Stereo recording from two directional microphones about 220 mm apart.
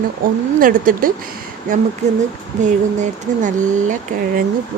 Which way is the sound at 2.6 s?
35° right (ahead or behind).